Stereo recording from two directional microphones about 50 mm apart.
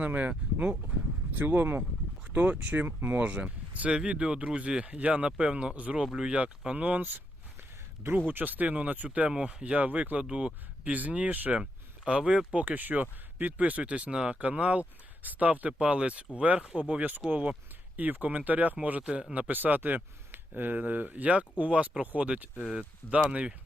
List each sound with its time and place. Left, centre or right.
0.0 s speech: right
1.3 s speech: right
2.3 s speech: right
6.7 s speech: right
8.3 s speech: right
9.3 s speech: centre
11.6 s speech: centre
12.5 s speech: right
17.2 s speech: right